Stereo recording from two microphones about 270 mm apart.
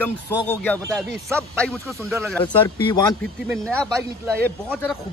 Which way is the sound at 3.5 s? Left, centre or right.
Centre.